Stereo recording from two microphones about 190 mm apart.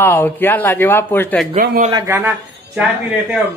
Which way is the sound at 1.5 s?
50° right (ahead or behind).